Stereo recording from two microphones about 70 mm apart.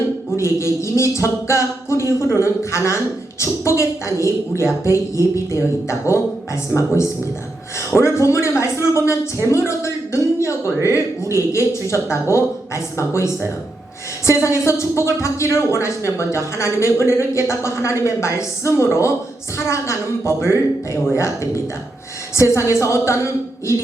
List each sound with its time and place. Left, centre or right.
0.3 s a woman's voice: left
22.4 s speech: left